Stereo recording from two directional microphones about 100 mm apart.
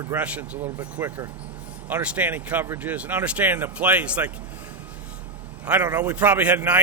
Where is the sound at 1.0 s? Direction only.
25° right (ahead or behind).